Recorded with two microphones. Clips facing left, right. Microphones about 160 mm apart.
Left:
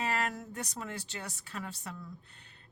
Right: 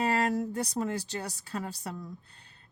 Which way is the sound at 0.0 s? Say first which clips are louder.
Right 7 dB; 35° right (ahead or behind).